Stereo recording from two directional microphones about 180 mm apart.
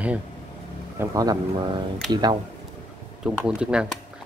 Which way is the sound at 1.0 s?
20° right (ahead or behind).